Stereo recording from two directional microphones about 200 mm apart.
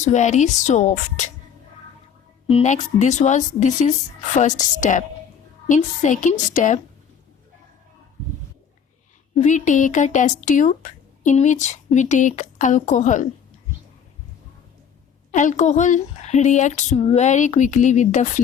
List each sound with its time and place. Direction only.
0.0 s speech: 35° left (ahead or behind)
2.5 s speech: 35° left (ahead or behind)
9.4 s speech: 40° left (ahead or behind)
15.3 s speech: 40° left (ahead or behind)